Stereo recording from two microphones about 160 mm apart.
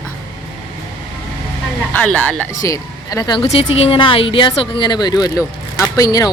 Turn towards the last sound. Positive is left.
turn(degrees=20)  # may be behind; listen again after turning